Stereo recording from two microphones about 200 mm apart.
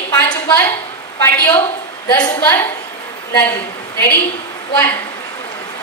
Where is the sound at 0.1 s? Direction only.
20° left (ahead or behind).